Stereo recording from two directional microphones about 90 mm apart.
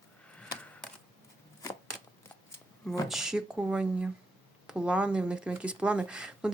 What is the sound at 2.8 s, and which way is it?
Speech, 5° right (ahead or behind).